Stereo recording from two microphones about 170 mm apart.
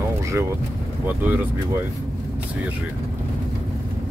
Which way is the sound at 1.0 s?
10° right (ahead or behind).